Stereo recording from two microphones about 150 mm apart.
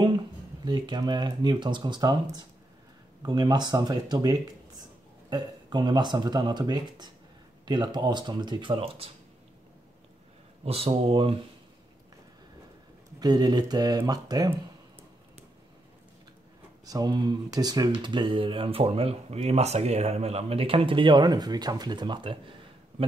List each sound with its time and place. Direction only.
0.7 s speech: 30° right (ahead or behind)
10.6 s speech: 40° right (ahead or behind)
13.2 s speech: 25° right (ahead or behind)
16.8 s speech: 25° right (ahead or behind)